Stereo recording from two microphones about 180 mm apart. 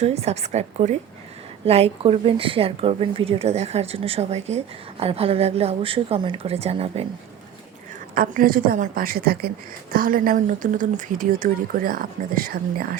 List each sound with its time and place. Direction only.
0.0 s speech: 35° right (ahead or behind)
8.1 s speech: 50° right (ahead or behind)